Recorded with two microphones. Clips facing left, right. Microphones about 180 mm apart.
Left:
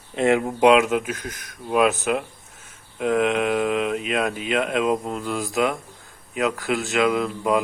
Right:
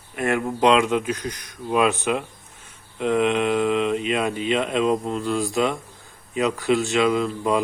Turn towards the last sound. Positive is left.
turn(degrees=5)  # may be behind; listen again after turning